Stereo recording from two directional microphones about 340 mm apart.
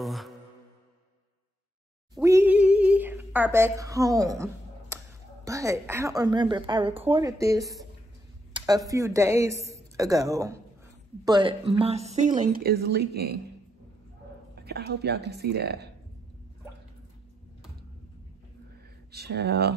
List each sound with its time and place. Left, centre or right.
0.0 s music: centre
2.1 s speech: centre; by 13.4 s right
14.5 s speech: right
19.1 s speech: right